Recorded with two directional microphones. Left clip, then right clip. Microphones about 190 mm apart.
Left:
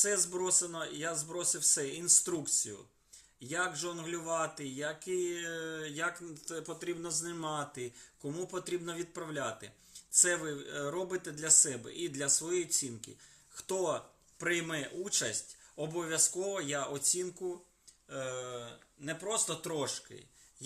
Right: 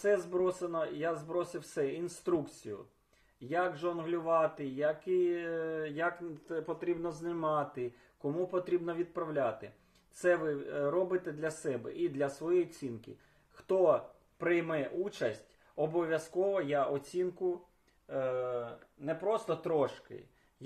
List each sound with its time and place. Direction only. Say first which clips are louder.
0.0 s speech: right 3 dB; 25° left (ahead or behind)